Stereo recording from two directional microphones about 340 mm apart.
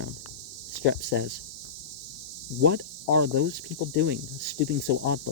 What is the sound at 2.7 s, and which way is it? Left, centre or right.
Speech, right.